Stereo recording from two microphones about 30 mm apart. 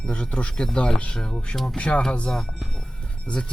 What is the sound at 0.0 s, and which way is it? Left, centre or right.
Speech, left.